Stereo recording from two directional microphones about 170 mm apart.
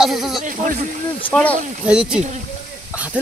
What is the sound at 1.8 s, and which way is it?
Speech, 5° right (ahead or behind).